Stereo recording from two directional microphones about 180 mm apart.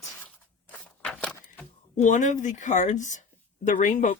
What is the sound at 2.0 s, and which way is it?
Speech, 40° left (ahead or behind).